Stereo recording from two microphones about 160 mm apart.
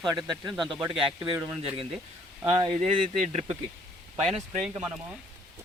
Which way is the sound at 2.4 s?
35° right (ahead or behind).